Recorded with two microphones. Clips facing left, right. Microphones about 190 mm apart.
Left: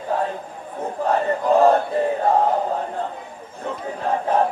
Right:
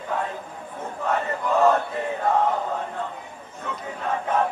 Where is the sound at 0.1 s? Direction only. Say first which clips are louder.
Left 4 dB; 35° left (ahead or behind).